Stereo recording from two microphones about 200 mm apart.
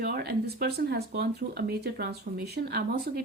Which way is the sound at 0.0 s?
50° right (ahead or behind).